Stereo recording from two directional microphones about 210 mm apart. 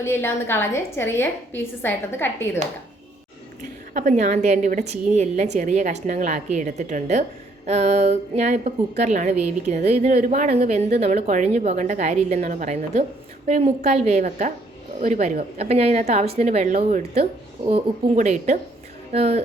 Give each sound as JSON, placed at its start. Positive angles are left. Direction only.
{"t": 0.0, "sound": "a woman's voice", "side_deg": 10}
{"t": 3.6, "sound": "a woman's voice", "side_deg": -35}